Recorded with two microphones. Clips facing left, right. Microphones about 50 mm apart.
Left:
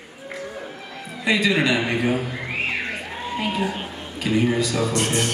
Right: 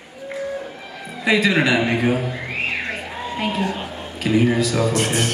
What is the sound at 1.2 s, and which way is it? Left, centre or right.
Speech, centre.